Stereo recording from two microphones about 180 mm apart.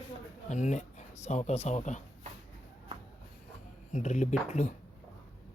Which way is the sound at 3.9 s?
40° left (ahead or behind).